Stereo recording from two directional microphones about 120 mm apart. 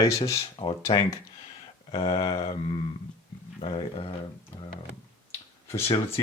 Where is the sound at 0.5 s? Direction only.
45° left (ahead or behind).